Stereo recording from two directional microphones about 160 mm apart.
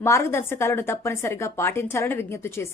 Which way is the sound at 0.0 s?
15° left (ahead or behind).